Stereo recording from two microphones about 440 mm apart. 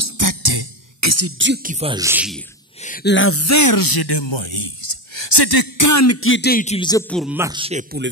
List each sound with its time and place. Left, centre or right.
0.0 s music: right
1.0 s speech: right; by 2.4 s centre
2.8 s speech: centre; by 4.6 s left
5.1 s speech: left; by 8.1 s centre